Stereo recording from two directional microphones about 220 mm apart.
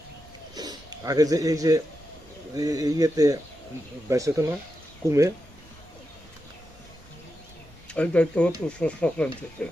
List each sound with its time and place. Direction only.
0.5 s a sound: 20° right (ahead or behind)
2.6 s speech: 15° right (ahead or behind)
7.9 s speech: 5° left (ahead or behind)